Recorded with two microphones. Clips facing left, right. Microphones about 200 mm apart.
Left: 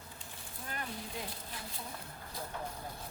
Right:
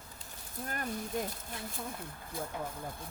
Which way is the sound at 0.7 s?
45° right (ahead or behind).